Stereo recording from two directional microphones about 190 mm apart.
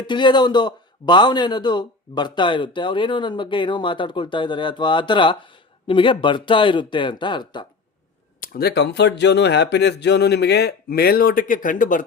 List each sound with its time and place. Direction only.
0.1 s a man's voice: 25° left (ahead or behind)
8.4 s speech: 55° left (ahead or behind)